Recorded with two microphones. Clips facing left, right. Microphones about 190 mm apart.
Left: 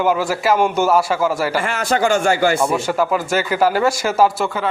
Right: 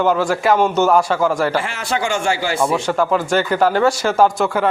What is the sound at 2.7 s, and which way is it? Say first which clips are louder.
Speech: right 1 dB; 10° left (ahead or behind).